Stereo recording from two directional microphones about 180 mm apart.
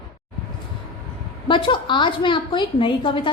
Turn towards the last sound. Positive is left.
turn(degrees=30)  # may be behind; listen again after turning